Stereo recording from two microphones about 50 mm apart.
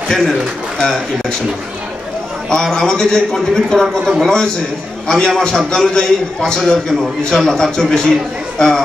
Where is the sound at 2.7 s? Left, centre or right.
Centre.